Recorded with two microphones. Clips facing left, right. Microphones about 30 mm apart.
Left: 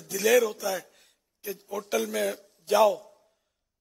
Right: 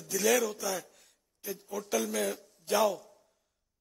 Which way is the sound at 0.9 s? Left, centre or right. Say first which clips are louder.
Left 2 dB; left.